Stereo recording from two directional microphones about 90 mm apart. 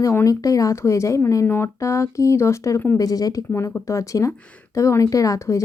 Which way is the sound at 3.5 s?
30° left (ahead or behind).